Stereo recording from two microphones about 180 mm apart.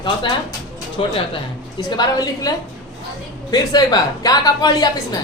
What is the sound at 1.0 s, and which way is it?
A man's voice, 30° left (ahead or behind).